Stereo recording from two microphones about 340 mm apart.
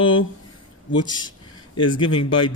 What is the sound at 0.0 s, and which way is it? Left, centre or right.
Speech, left.